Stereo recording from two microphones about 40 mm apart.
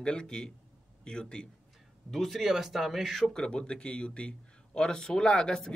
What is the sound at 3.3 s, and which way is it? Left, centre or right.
A man's voice, left.